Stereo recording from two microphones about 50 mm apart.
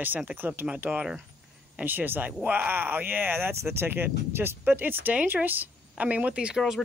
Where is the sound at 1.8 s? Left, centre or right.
Right.